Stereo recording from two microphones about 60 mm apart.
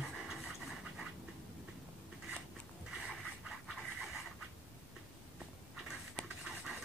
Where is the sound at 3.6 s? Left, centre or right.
Centre.